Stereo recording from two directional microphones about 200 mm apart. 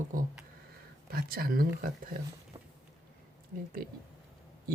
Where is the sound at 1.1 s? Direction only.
50° right (ahead or behind).